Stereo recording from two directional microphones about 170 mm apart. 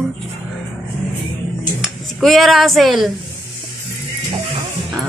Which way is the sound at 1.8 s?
Centre (ahead or behind).